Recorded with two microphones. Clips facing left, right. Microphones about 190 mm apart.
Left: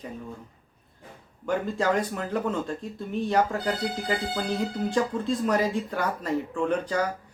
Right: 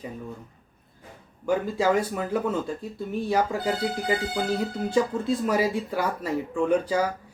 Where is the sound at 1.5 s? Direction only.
10° right (ahead or behind).